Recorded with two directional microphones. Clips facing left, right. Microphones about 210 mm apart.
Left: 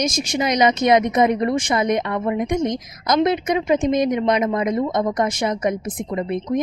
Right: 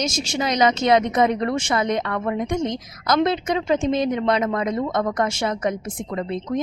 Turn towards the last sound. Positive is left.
turn(degrees=15)  # may be behind; listen again after turning